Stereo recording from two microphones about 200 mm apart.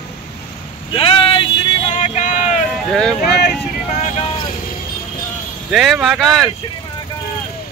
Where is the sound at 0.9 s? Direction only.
25° left (ahead or behind).